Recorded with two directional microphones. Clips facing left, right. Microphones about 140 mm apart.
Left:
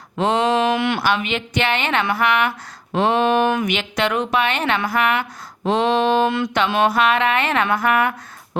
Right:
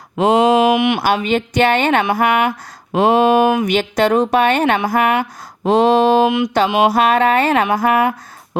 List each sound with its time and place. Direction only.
0.4 s a sound: 10° right (ahead or behind)
1.0 s a woman's voice: 40° right (ahead or behind)
6.2 s music: 15° right (ahead or behind)
6.9 s a woman's voice: 40° right (ahead or behind)